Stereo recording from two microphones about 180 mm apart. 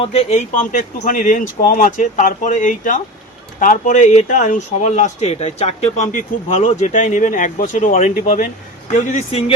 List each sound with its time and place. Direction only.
0.0 s speech: 35° left (ahead or behind)